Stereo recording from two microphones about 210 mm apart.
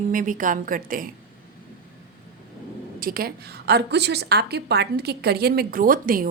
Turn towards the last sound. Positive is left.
turn(degrees=-40)  # may be behind; listen again after turning